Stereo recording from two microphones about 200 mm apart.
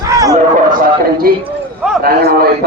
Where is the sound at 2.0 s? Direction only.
50° right (ahead or behind).